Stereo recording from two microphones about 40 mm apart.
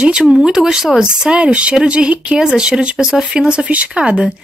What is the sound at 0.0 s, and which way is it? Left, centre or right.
Speech, right.